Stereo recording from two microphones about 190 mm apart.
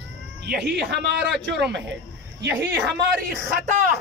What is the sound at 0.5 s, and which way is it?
A man's voice, 60° right (ahead or behind).